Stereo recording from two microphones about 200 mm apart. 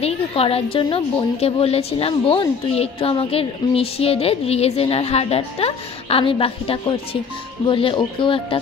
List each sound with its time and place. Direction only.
0.0 s a woman's voice: 30° left (ahead or behind)